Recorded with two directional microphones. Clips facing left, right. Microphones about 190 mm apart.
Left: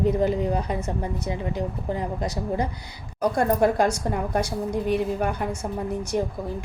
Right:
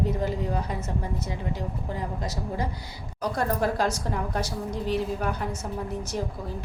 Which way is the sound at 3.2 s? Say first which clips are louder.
Left 6 dB; 55° left (ahead or behind).